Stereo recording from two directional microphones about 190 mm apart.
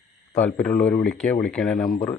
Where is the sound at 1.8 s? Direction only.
45° left (ahead or behind).